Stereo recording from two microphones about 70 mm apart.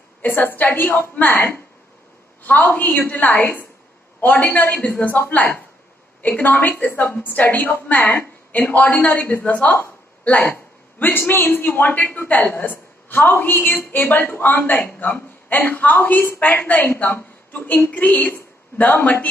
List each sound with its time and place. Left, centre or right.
0.2 s a man's voice: left